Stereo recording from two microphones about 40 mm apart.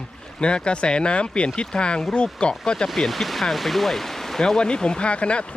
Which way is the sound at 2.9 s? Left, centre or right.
Centre.